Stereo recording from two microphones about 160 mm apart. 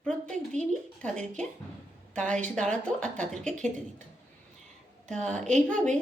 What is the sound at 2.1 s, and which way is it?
Speech, 5° left (ahead or behind).